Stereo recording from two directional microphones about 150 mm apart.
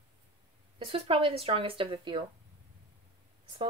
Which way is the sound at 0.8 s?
35° right (ahead or behind).